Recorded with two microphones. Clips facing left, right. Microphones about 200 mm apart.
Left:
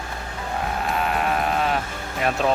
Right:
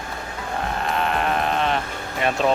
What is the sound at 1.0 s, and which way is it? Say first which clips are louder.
Sheep: right 1 dB; 5° left (ahead or behind).